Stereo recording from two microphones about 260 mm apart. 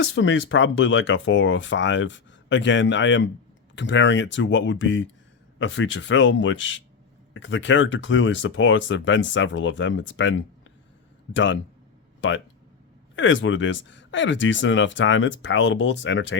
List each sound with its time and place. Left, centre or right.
0.0 s speech: left
11.3 s speech: left
13.1 s speech: left